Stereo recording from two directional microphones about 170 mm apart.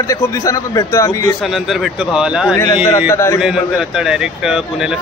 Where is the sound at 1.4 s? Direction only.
Centre (ahead or behind).